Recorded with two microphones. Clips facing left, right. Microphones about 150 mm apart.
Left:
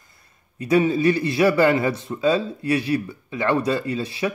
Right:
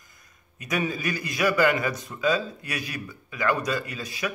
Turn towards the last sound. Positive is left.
turn(degrees=30)  # may be behind; listen again after turning